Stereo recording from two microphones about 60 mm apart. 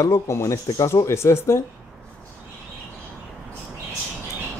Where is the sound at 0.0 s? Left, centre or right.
Left.